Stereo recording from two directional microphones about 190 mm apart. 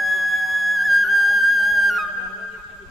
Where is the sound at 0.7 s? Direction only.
Centre (ahead or behind).